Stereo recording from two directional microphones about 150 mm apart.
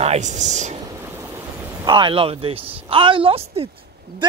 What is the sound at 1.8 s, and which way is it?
A woman's voice, 30° right (ahead or behind).